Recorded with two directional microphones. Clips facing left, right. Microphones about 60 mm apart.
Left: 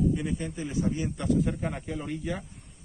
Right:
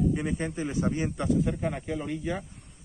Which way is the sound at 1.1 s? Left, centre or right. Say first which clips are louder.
Even; centre.